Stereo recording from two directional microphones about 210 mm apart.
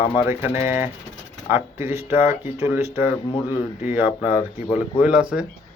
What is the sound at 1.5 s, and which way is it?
Speech, 10° right (ahead or behind).